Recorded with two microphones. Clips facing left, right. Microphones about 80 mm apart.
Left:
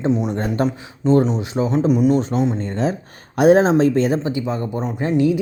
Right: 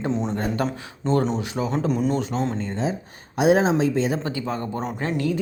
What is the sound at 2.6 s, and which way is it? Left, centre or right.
Speech, left.